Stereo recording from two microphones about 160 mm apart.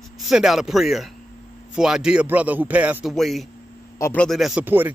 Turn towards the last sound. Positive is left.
turn(degrees=-15)  # may be behind; listen again after turning